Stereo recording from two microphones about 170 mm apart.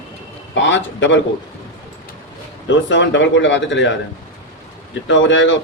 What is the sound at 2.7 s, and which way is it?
Speech, 90° left.